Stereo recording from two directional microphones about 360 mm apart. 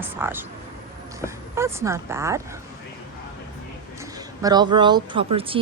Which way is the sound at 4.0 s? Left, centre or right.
Centre.